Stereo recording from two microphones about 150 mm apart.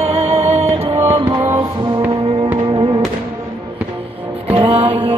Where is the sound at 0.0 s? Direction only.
45° right (ahead or behind).